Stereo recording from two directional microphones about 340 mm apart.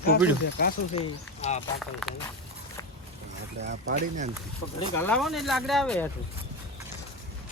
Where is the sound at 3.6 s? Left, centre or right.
Right.